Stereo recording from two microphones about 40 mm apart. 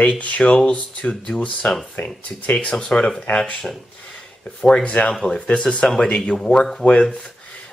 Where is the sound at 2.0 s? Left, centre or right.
Left.